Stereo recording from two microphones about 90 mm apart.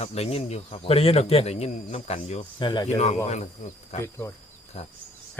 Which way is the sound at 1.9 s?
75° left (ahead or behind).